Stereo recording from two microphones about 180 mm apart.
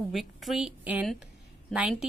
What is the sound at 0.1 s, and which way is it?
Speech, centre (ahead or behind).